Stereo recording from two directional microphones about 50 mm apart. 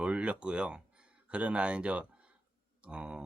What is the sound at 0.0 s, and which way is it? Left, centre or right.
Speech, right.